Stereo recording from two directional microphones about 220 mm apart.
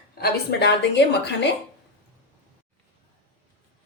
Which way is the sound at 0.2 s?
50° left (ahead or behind).